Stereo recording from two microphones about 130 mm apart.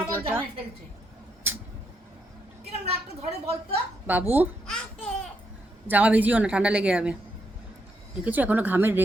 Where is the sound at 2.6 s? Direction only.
55° right (ahead or behind).